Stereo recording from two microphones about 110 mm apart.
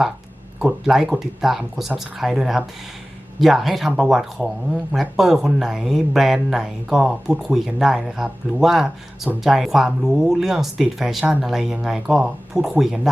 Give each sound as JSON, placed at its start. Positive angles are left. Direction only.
{"t": 0.6, "sound": "speech", "side_deg": -5}